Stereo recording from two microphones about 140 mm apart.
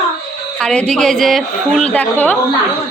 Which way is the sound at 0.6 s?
5° left (ahead or behind).